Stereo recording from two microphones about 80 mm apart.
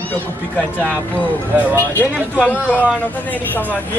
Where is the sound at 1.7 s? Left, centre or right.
Left.